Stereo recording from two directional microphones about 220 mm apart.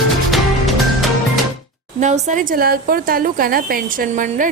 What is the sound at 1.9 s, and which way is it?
Speech, 30° right (ahead or behind).